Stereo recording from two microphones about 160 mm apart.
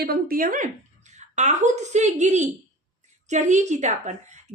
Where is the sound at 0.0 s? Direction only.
70° right (ahead or behind).